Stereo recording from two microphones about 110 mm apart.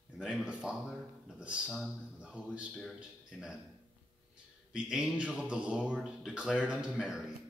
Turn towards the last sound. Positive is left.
turn(degrees=-10)  # may be behind; listen again after turning